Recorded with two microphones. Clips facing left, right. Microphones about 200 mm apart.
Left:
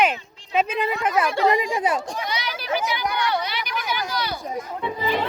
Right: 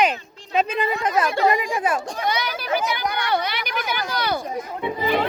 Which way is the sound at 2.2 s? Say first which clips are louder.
Right 4 dB; 50° right (ahead or behind).